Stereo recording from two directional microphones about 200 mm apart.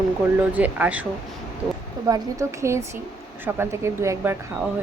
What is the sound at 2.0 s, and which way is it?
Speech, 15° right (ahead or behind).